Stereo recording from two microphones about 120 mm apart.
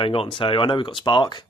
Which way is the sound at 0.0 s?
45° left (ahead or behind).